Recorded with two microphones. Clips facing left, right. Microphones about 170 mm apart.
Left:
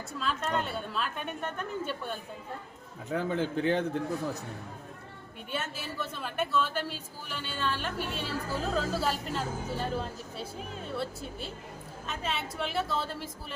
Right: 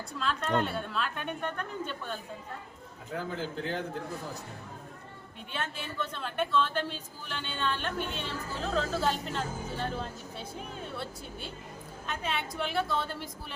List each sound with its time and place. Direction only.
0.1 s a woman's voice: centre (ahead or behind)
3.2 s a man's voice: 65° left (ahead or behind)
5.5 s a woman's voice: 5° left (ahead or behind)